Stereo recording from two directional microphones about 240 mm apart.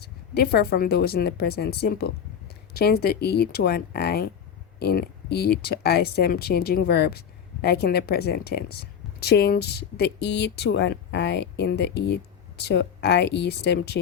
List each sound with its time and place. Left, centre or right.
0.0 s speech: left